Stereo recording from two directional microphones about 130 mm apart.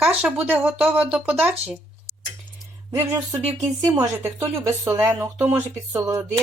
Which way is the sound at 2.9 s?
25° right (ahead or behind).